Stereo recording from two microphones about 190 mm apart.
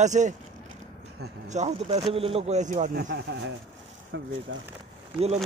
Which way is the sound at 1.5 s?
35° right (ahead or behind).